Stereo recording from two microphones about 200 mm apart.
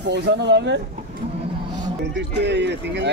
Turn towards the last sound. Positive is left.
turn(degrees=-60)  # may be behind; listen again after turning